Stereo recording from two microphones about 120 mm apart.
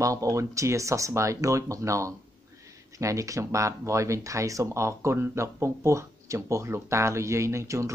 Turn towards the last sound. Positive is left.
turn(degrees=-25)  # may be behind; listen again after turning